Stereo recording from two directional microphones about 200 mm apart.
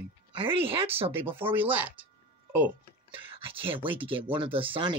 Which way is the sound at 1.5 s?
10° right (ahead or behind).